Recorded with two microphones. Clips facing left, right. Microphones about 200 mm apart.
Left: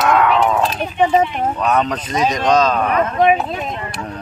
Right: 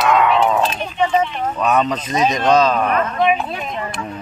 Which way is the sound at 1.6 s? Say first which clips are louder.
Right 2 dB; 10° right (ahead or behind).